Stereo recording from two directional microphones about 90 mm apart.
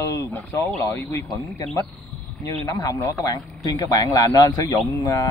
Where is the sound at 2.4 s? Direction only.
40° left (ahead or behind).